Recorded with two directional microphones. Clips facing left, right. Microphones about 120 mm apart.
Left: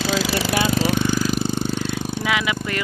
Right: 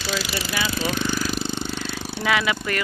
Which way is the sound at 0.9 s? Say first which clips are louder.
Left 4 dB; 15° left (ahead or behind).